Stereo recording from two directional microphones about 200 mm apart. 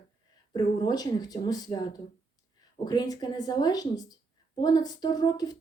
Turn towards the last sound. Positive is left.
turn(degrees=20)  # may be behind; listen again after turning